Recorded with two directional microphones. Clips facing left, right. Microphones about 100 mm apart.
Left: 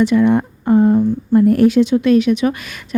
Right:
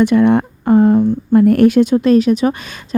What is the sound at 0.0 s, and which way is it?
Speech, 55° right (ahead or behind).